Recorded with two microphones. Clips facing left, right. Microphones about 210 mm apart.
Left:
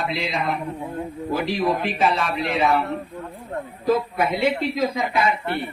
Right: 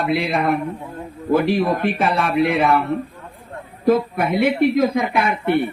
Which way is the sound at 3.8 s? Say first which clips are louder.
Right 4 dB; 55° right (ahead or behind).